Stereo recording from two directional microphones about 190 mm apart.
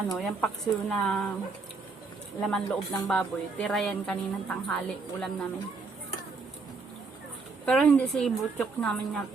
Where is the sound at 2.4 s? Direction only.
5° left (ahead or behind).